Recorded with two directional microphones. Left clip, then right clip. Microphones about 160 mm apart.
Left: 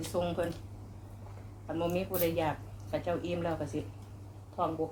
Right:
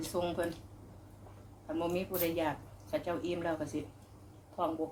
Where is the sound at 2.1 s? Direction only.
20° right (ahead or behind).